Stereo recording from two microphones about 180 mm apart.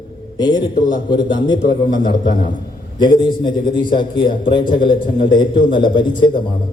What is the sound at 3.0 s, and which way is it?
A man's voice, 25° left (ahead or behind).